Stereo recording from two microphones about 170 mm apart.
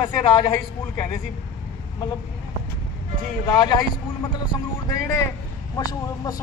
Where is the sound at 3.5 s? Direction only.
25° left (ahead or behind).